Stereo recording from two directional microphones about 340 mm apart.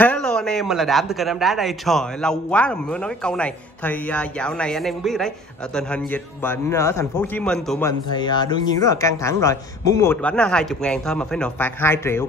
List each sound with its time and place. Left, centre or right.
0.0 s speech: centre
8.1 s speech: centre